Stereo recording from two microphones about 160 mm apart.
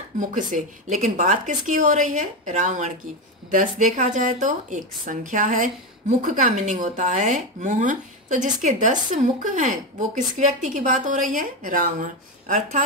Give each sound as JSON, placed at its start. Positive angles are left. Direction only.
{"t": 0.2, "sound": "a woman's voice", "side_deg": -55}